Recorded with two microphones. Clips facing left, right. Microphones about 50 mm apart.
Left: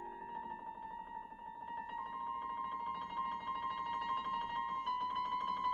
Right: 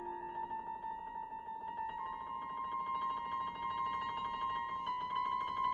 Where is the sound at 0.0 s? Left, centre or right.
Centre.